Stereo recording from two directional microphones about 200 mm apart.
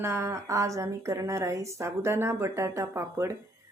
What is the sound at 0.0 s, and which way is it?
A woman's voice, 15° right (ahead or behind).